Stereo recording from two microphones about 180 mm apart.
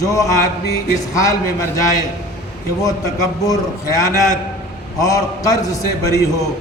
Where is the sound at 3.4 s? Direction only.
20° left (ahead or behind).